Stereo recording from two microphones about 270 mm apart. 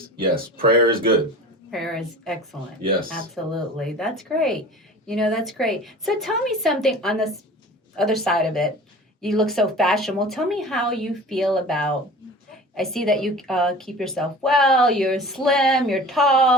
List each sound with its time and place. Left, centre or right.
0.5 s speech: right
1.7 s a woman's voice: centre